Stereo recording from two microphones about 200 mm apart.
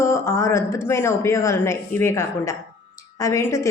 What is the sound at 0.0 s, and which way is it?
A woman's voice, 15° left (ahead or behind).